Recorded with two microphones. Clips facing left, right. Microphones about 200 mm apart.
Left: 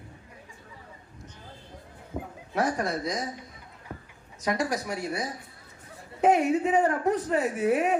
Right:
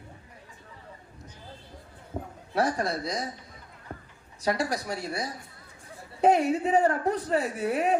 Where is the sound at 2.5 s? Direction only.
35° right (ahead or behind).